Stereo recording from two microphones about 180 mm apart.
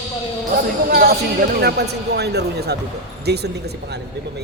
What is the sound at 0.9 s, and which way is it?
Speech, 60° right (ahead or behind).